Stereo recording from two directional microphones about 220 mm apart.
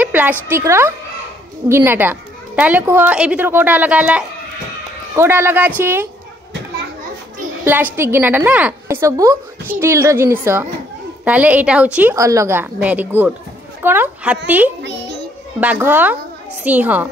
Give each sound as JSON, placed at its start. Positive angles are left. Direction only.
{"t": 0.0, "sound": "a woman's voice", "side_deg": -5}
{"t": 7.6, "sound": "a woman's voice", "side_deg": -10}
{"t": 14.8, "sound": "music", "side_deg": -50}
{"t": 15.6, "sound": "a woman's voice", "side_deg": -10}